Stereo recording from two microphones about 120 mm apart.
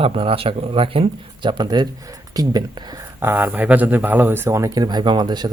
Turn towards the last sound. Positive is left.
turn(degrees=-35)  # may be behind; listen again after turning